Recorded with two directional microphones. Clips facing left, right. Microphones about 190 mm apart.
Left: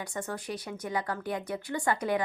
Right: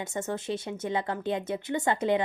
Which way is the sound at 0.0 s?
25° right (ahead or behind).